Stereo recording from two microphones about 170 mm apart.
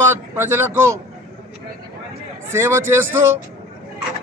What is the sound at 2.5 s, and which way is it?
Speech, 15° right (ahead or behind).